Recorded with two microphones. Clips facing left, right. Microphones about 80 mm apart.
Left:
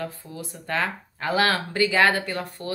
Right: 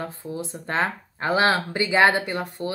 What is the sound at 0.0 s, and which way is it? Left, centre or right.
Speech, right.